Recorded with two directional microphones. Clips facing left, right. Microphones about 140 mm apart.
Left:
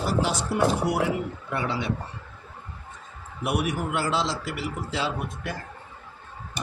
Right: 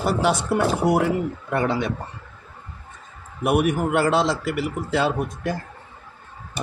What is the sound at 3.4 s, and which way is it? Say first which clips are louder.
A man's voice: right 7 dB; 50° right (ahead or behind).